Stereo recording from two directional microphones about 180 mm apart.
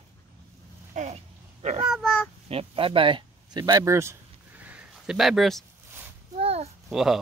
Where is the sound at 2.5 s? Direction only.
30° right (ahead or behind); by 5.6 s centre (ahead or behind).